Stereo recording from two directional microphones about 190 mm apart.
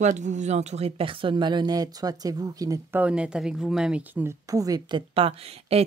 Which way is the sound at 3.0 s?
5° right (ahead or behind).